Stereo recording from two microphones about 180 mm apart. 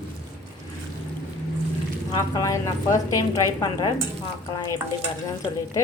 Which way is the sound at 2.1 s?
20° left (ahead or behind).